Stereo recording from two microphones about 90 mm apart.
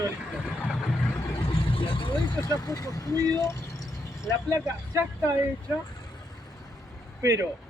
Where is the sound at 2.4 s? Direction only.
45° left (ahead or behind).